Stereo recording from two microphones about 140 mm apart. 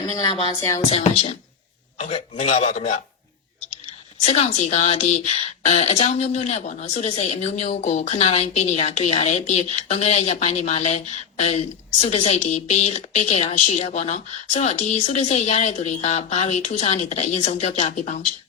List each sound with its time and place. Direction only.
0.2 s music: 35° left (ahead or behind)
0.9 s speech: 45° left (ahead or behind)
4.3 s speech: 50° left (ahead or behind)